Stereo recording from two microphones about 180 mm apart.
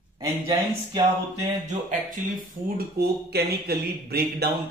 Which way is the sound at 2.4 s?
60° right (ahead or behind).